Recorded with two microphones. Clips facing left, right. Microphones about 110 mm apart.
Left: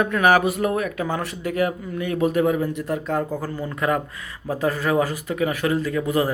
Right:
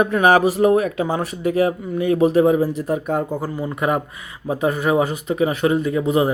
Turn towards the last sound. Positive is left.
turn(degrees=-20)  # may be behind; listen again after turning